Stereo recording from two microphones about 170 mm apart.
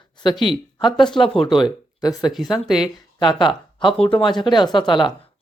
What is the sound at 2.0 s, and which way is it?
Speech, 20° left (ahead or behind).